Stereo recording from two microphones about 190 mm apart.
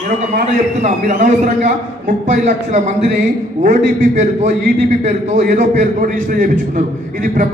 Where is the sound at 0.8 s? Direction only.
40° right (ahead or behind).